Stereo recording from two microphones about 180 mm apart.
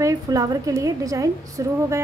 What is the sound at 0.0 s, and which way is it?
A woman's voice, 20° right (ahead or behind).